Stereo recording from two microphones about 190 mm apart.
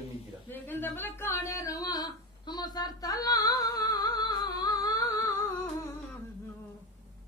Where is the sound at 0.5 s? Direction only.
10° left (ahead or behind).